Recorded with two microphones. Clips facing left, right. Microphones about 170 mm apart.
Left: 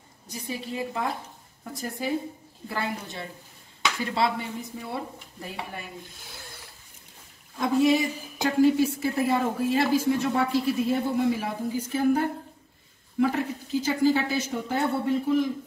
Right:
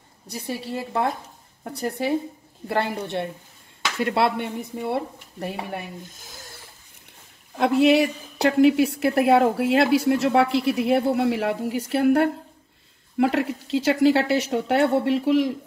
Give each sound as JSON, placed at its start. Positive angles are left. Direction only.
{"t": 0.3, "sound": "a woman's voice", "side_deg": -70}
{"t": 7.5, "sound": "a woman's voice", "side_deg": -70}